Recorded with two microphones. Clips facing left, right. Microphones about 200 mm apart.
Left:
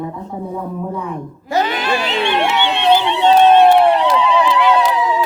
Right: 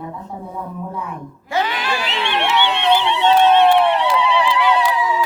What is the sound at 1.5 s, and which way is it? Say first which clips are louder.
Speech: left 3 dB; 40° left (ahead or behind).